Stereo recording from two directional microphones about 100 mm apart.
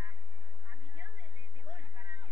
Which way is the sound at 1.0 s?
30° right (ahead or behind).